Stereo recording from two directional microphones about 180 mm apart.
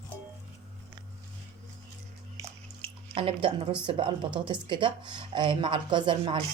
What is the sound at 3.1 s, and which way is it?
Speech, 30° right (ahead or behind).